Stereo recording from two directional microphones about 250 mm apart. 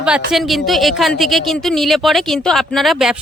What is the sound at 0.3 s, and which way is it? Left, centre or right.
Speech, centre.